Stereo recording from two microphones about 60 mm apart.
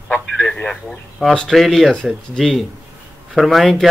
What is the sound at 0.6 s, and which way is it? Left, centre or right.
Speech, centre.